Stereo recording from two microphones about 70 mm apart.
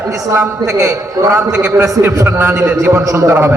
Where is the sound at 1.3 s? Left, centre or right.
Right.